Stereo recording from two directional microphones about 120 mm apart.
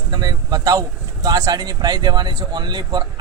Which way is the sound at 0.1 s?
35° right (ahead or behind).